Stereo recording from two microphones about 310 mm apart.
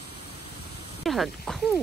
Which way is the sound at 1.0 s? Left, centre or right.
Centre.